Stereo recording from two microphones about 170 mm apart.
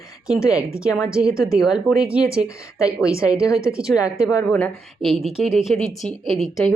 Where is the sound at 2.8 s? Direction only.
20° left (ahead or behind).